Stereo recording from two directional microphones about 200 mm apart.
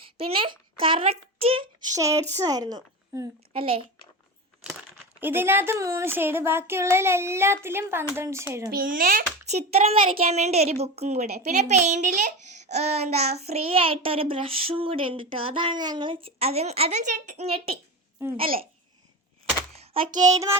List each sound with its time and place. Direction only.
0.0 s a child's voice: 30° right (ahead or behind)
2.0 s a woman's voice: 15° right (ahead or behind)
3.5 s speech: 25° right (ahead or behind)
5.2 s speech: 10° right (ahead or behind)
8.7 s a child's voice: 45° right (ahead or behind)
19.7 s a sound: 30° right (ahead or behind)
20.3 s speech: 15° right (ahead or behind)